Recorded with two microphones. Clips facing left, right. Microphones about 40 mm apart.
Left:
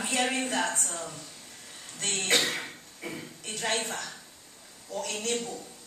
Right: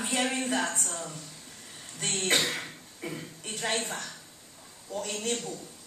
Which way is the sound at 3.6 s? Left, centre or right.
Centre.